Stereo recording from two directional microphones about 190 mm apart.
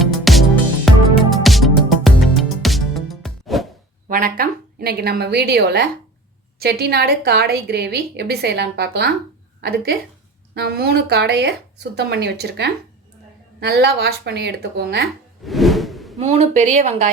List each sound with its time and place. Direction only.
0.0 s music: centre (ahead or behind)
4.1 s a woman's voice: 50° right (ahead or behind)
15.4 s whoosh: centre (ahead or behind)
16.1 s speech: 30° right (ahead or behind)